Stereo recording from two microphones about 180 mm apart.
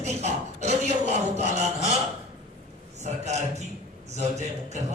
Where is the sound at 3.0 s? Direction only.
40° right (ahead or behind).